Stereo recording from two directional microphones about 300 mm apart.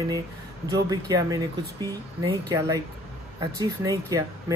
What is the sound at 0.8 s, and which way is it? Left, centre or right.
Speech, centre.